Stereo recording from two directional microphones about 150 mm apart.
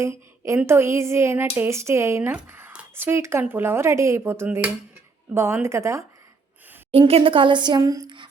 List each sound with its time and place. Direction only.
0.0 s a woman's voice: 15° right (ahead or behind)
6.9 s a woman's voice: 40° right (ahead or behind)